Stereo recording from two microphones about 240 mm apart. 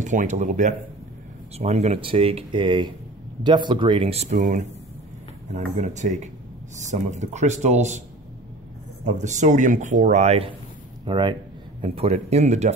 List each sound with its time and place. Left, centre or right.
0.0 s speech: right
9.0 s speech: right